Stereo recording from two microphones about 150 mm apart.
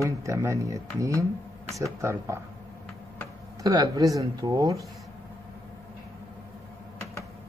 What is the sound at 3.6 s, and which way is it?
Speech, 25° right (ahead or behind).